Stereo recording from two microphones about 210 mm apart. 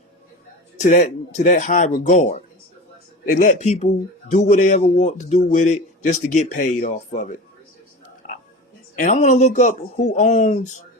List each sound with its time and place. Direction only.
0.8 s speech: 35° left (ahead or behind)
8.2 s oink: 35° left (ahead or behind)
9.0 s speech: 35° left (ahead or behind)